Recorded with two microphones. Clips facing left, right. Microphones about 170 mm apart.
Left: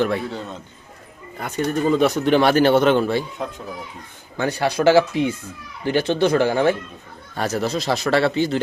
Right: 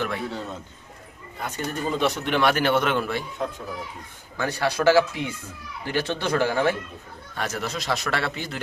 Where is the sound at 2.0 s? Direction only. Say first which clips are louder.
Left 4 dB; 35° left (ahead or behind).